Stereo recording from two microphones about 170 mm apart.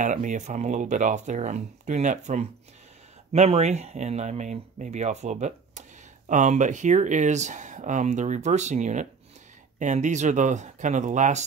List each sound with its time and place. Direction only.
0.0 s speech: 45° right (ahead or behind)